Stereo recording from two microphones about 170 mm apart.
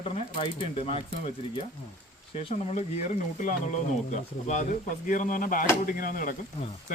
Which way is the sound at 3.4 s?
45° left (ahead or behind).